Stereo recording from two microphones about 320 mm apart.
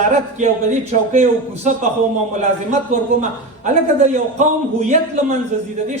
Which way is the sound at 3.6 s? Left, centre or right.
Right.